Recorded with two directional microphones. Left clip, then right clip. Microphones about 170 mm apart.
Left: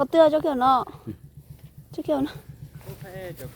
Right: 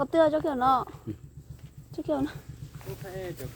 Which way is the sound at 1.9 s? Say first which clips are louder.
Left 4 dB; 70° left (ahead or behind).